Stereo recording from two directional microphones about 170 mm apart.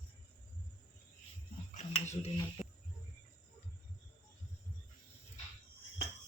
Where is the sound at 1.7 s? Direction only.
40° left (ahead or behind).